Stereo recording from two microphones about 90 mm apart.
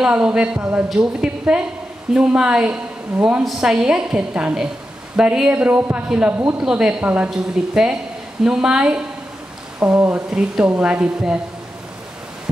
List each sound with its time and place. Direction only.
0.0 s a woman's voice: 10° right (ahead or behind)
6.6 s a woman's voice: 10° right (ahead or behind)